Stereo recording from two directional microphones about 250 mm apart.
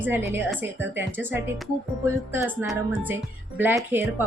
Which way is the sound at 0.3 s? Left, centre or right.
Centre.